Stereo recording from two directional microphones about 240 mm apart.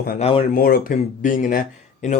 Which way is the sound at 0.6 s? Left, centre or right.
Left.